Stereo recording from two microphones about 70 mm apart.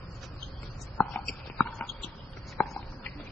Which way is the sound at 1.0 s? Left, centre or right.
Left.